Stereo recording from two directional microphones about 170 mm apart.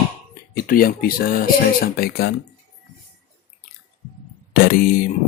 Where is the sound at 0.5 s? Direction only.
55° left (ahead or behind).